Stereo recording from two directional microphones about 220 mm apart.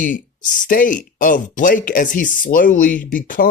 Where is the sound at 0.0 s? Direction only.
35° left (ahead or behind).